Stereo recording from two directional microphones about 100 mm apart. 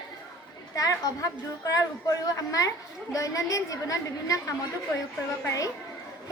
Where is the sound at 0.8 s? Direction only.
35° left (ahead or behind).